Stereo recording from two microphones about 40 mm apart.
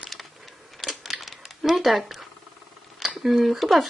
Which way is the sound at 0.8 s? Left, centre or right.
Centre.